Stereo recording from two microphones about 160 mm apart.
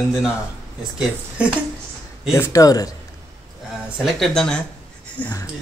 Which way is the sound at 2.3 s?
20° left (ahead or behind).